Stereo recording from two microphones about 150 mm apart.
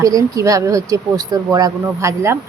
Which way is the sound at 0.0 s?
25° right (ahead or behind).